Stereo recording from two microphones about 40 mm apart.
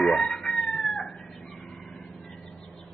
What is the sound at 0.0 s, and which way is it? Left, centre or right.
Cat, centre.